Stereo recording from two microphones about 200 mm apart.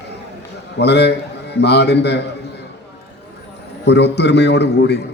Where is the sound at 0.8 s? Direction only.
55° left (ahead or behind).